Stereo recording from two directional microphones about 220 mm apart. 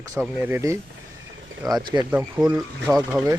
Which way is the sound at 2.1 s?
5° right (ahead or behind).